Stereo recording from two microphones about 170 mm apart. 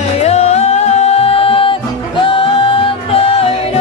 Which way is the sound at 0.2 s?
40° left (ahead or behind).